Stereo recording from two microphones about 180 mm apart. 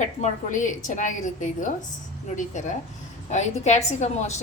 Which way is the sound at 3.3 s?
40° left (ahead or behind).